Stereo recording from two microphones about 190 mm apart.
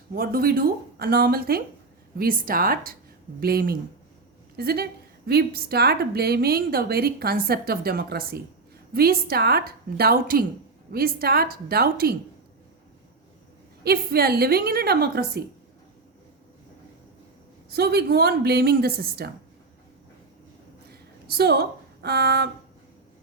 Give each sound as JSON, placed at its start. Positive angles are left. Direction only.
{"t": 0.1, "sound": "a woman's voice", "side_deg": -50}
{"t": 13.8, "sound": "speech", "side_deg": -55}
{"t": 17.7, "sound": "speech", "side_deg": -55}
{"t": 21.2, "sound": "a woman's voice", "side_deg": -55}